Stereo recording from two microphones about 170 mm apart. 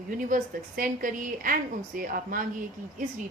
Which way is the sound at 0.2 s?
50° right (ahead or behind).